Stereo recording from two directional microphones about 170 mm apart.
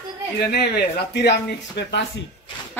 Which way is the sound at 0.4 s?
65° left (ahead or behind).